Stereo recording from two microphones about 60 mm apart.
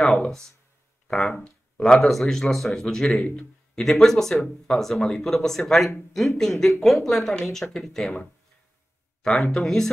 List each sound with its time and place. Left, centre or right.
0.0 s speech: centre
1.0 s a sound: centre
1.4 s speech: centre
2.0 s a man's voice: centre
3.8 s speech: centre
9.2 s speech: centre